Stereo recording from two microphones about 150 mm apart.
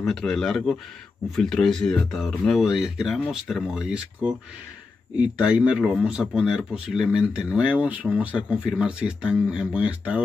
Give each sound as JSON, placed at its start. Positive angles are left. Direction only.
{"t": 0.0, "sound": "speech", "side_deg": 5}